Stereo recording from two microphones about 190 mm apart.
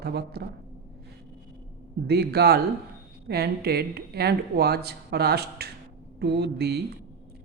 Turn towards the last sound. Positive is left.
turn(degrees=-60)  # may be behind; listen again after turning